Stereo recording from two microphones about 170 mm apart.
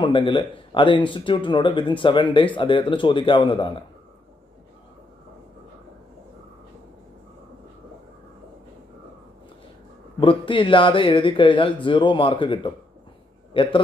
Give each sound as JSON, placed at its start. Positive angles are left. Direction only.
{"t": 0.0, "sound": "speech", "side_deg": 30}
{"t": 10.2, "sound": "a man's voice", "side_deg": 30}